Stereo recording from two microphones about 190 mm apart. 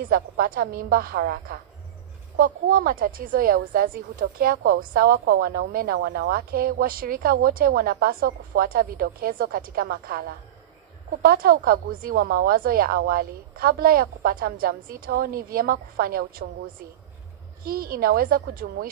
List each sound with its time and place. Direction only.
0.1 s a woman's voice: 50° right (ahead or behind)
11.2 s a woman's voice: 50° right (ahead or behind)
17.6 s a woman's voice: 50° right (ahead or behind)